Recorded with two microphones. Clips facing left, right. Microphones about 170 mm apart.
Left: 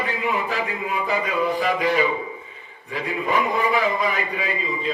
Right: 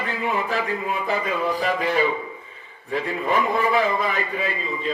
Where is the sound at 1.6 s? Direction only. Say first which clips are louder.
Left 1 dB; 40° right (ahead or behind).